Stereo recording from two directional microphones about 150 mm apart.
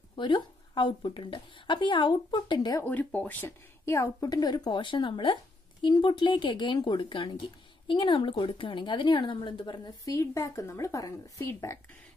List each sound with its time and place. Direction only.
0.1 s a woman's voice: 30° left (ahead or behind)
2.8 s a woman's voice: 10° left (ahead or behind)